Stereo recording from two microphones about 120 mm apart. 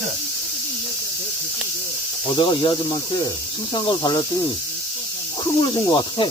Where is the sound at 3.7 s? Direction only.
40° left (ahead or behind).